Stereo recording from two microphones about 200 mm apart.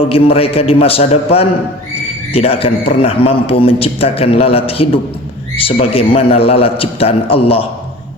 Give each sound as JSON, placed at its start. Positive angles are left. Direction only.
{"t": 0.1, "sound": "a man's voice", "side_deg": 30}